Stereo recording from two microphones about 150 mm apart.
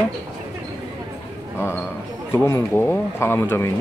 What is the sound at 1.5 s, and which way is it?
Speech, 15° left (ahead or behind).